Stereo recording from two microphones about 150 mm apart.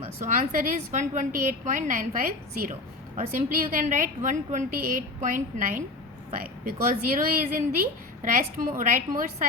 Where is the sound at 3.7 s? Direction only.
60° right (ahead or behind).